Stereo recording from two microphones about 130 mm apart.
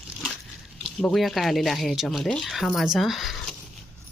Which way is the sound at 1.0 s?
Centre (ahead or behind).